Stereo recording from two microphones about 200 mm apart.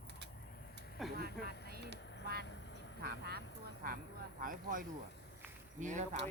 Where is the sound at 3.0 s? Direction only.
50° right (ahead or behind).